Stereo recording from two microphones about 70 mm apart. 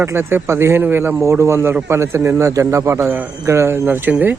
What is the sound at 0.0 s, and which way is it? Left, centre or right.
A man's voice, right.